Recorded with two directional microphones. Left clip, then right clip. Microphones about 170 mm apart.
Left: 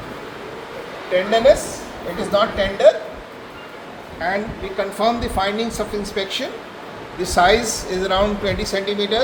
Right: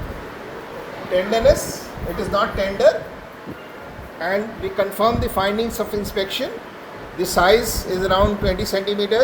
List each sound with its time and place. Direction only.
2.1 s a woman's voice: 25° right (ahead or behind)
4.2 s a man's voice: 45° right (ahead or behind)